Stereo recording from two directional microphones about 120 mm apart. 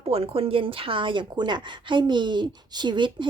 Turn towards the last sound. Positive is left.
turn(degrees=-40)  # may be behind; listen again after turning